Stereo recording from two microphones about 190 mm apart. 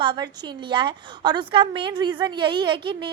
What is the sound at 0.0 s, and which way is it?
A woman's voice, 25° right (ahead or behind).